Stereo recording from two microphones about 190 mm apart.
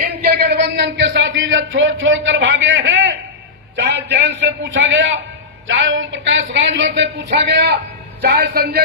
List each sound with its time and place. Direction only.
0.0 s a man's voice: 50° right (ahead or behind); by 3.1 s 75° right (ahead or behind)
3.8 s a man's voice: 65° right (ahead or behind)